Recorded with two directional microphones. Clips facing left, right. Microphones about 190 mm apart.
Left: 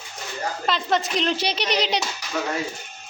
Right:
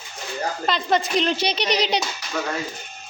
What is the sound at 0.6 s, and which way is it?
A child's voice, centre (ahead or behind).